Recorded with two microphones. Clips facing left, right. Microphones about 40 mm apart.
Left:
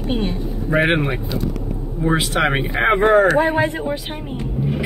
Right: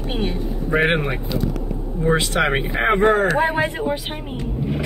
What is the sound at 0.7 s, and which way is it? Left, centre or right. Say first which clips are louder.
Speech: left 1 dB; centre.